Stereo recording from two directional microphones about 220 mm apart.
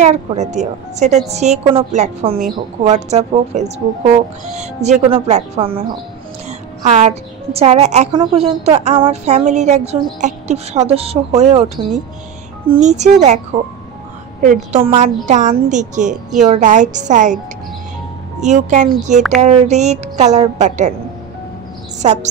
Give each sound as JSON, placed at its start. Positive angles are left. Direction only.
{"t": 0.0, "sound": "a woman's voice", "side_deg": -30}
{"t": 6.8, "sound": "a woman's voice", "side_deg": -30}
{"t": 14.4, "sound": "a woman's voice", "side_deg": -35}
{"t": 18.4, "sound": "a woman's voice", "side_deg": -30}
{"t": 22.0, "sound": "a woman's voice", "side_deg": -30}